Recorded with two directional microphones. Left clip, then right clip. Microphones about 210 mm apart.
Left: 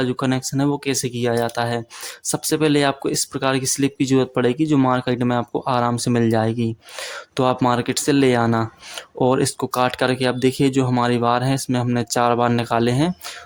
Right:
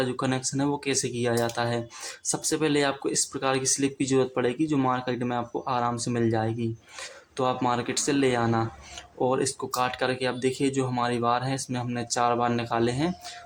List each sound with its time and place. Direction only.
0.0 s speech: 35° left (ahead or behind)